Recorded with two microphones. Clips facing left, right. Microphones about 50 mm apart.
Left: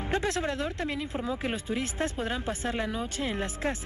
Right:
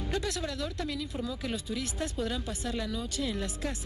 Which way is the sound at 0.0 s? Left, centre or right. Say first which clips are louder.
Left 4 dB; left.